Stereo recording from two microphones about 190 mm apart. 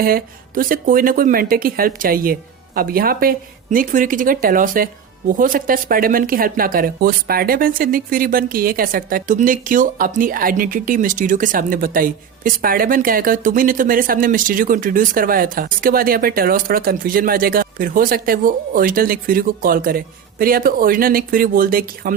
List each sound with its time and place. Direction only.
0.0 s speech: 50° right (ahead or behind)